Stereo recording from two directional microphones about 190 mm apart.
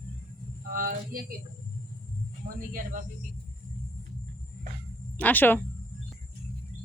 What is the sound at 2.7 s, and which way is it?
Speech, 45° right (ahead or behind).